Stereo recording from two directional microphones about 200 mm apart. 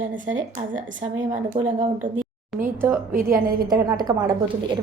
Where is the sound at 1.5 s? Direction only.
30° right (ahead or behind).